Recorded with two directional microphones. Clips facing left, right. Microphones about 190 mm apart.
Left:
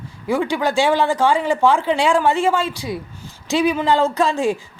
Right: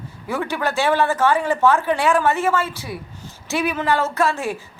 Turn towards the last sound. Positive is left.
turn(degrees=15)  # may be behind; listen again after turning